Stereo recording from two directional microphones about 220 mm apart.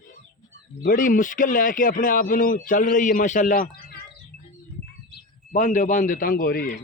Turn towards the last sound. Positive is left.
turn(degrees=40)  # may be behind; listen again after turning